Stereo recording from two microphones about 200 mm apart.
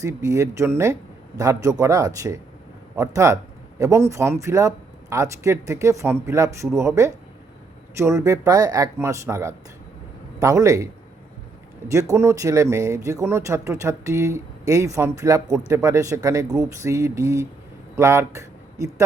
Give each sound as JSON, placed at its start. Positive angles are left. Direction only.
{"t": 0.0, "sound": "a man's voice", "side_deg": -15}
{"t": 11.9, "sound": "speech", "side_deg": -15}